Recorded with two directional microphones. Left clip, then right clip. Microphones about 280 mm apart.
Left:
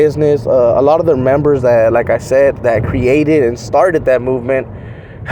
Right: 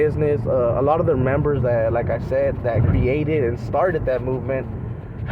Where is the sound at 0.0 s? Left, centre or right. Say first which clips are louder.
Left 9 dB; left.